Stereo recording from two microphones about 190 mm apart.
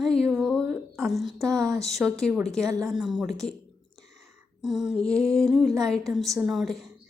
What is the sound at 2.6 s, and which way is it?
Speech, 15° right (ahead or behind).